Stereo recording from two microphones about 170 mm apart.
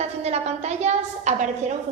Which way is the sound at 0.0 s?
40° right (ahead or behind).